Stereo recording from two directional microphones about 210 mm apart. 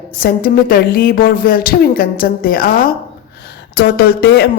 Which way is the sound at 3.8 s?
50° left (ahead or behind).